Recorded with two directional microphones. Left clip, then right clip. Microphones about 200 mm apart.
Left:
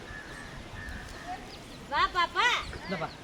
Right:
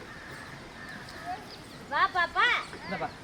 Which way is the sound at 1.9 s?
55° left (ahead or behind).